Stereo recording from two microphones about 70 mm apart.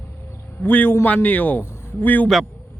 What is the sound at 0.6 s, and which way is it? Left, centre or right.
A man's voice, left.